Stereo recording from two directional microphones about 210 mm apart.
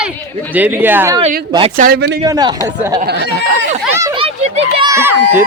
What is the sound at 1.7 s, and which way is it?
Speech, 45° right (ahead or behind).